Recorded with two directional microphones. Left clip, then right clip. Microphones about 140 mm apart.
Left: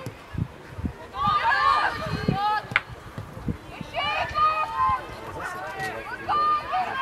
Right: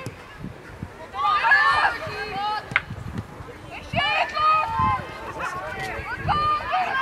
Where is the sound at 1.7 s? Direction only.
15° right (ahead or behind).